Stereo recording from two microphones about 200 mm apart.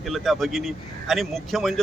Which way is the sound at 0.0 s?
Centre (ahead or behind).